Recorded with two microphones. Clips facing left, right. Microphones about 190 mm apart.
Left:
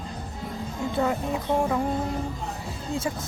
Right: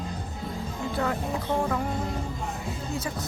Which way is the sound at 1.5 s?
20° left (ahead or behind).